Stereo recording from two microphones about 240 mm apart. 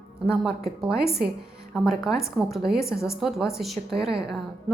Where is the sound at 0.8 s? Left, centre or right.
Centre.